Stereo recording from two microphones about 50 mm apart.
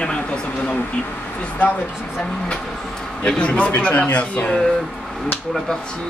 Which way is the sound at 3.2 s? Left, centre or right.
Left.